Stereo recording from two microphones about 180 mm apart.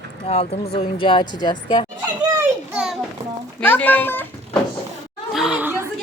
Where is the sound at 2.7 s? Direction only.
5° right (ahead or behind).